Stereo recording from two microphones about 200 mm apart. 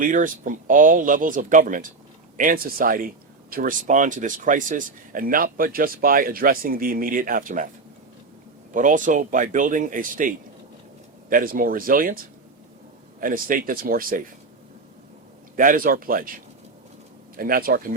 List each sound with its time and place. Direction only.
0.0 s speech: 40° right (ahead or behind)
8.7 s speech: 40° right (ahead or behind)
15.5 s speech: 45° right (ahead or behind)
17.3 s speech: 45° right (ahead or behind)